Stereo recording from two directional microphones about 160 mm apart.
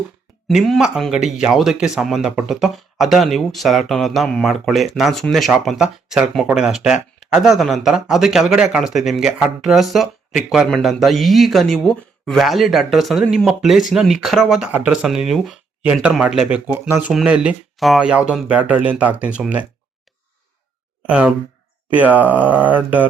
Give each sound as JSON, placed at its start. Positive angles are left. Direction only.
{"t": 0.4, "sound": "speech", "side_deg": 0}
{"t": 21.1, "sound": "speech", "side_deg": -5}